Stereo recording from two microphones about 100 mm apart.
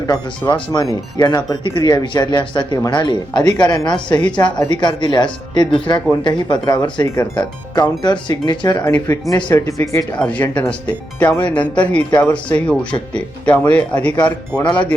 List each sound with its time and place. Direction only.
0.1 s speech: 50° left (ahead or behind)
1.4 s speech: 50° left (ahead or behind)
4.2 s speech: 10° left (ahead or behind)
4.7 s speech: 45° left (ahead or behind)
9.6 s speech: 30° left (ahead or behind)
10.2 s speech: 15° left (ahead or behind)